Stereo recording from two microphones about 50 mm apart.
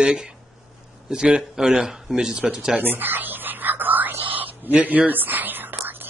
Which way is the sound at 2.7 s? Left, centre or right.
Right.